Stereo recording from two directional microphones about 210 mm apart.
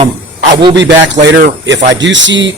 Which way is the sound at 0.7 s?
60° right (ahead or behind).